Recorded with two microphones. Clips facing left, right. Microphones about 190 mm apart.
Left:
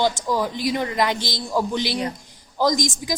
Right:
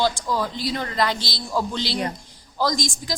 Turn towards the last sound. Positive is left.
turn(degrees=15)  # may be behind; listen again after turning